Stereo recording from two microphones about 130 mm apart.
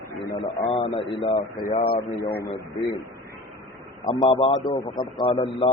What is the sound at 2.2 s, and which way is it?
Speech, 15° left (ahead or behind).